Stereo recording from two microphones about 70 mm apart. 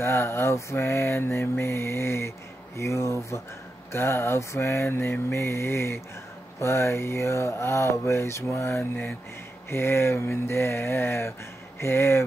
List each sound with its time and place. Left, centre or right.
0.0 s mantra: left
2.8 s speech: left
3.9 s mantra: left